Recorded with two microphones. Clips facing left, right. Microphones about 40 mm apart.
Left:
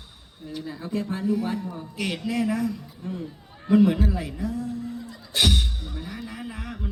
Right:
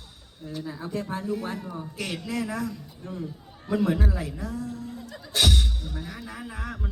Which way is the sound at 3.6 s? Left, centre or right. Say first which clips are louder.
Left 6 dB; left.